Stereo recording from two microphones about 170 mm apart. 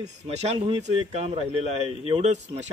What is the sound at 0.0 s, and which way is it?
Speech, 40° right (ahead or behind).